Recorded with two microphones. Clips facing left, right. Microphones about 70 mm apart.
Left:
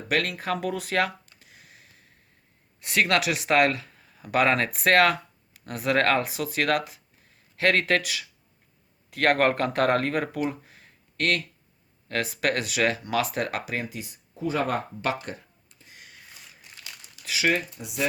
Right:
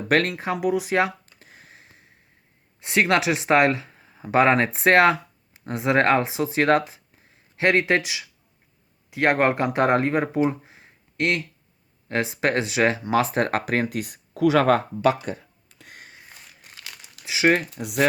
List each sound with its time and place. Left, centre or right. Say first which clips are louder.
0.1 s speech: right 5 dB; right
0.3 s speech: right 5 dB; centre
1.2 s a sound: right 4 dB; right
2.8 s speech: right 3 dB; right
16.7 s crumpling: right 3 dB; right
17.6 s speech: right 7 dB; right